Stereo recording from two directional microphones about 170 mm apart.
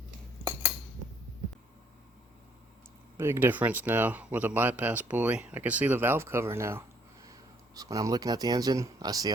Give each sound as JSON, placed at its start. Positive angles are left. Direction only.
{"t": 3.2, "sound": "speech", "side_deg": -15}